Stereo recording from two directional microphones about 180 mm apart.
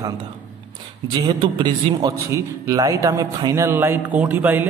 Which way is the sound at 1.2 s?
25° right (ahead or behind).